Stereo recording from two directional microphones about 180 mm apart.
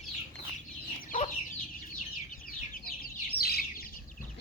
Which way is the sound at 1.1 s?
40° left (ahead or behind).